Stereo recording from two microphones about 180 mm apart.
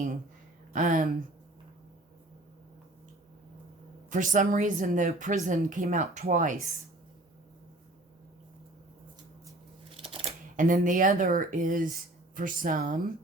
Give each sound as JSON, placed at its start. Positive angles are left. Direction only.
{"t": 0.7, "sound": "speech", "side_deg": -50}
{"t": 4.1, "sound": "a woman's voice", "side_deg": -45}
{"t": 10.0, "sound": "scissors", "side_deg": -30}
{"t": 10.6, "sound": "a woman's voice", "side_deg": -45}